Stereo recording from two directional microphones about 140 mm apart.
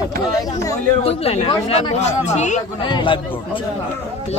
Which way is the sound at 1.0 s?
45° left (ahead or behind).